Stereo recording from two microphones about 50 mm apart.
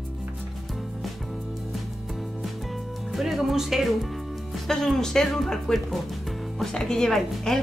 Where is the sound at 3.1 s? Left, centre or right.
Centre.